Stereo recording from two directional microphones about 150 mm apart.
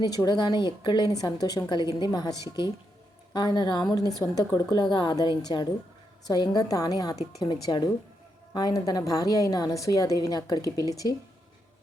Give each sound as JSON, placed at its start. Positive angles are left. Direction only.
{"t": 0.0, "sound": "a woman's voice", "side_deg": 25}